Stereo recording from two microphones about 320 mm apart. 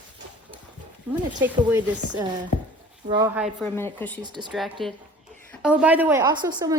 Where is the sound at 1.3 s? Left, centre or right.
Centre.